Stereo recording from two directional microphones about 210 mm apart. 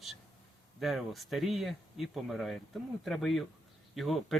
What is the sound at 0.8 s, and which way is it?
Speech, centre (ahead or behind).